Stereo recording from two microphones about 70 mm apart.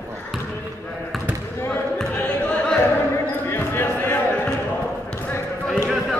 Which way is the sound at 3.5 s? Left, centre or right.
Left.